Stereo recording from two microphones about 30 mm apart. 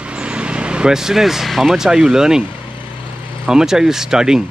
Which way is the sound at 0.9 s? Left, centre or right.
Centre.